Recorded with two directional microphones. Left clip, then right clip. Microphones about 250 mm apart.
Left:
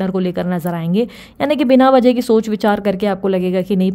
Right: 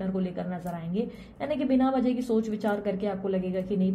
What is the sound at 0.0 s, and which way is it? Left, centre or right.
A woman's voice, left.